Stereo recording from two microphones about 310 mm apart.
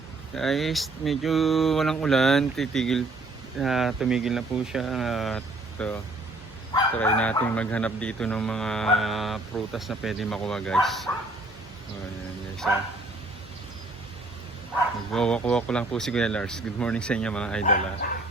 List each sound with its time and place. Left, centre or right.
0.3 s speech: centre
15.1 s speech: centre